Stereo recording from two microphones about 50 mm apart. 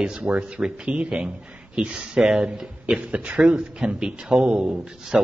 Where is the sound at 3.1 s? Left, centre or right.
Centre.